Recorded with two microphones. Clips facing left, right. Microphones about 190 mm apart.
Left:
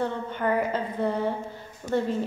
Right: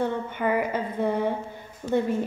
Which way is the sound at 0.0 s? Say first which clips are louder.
Right 1 dB; 15° right (ahead or behind).